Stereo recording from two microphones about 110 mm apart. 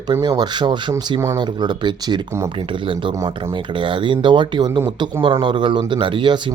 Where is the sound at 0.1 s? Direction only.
40° right (ahead or behind).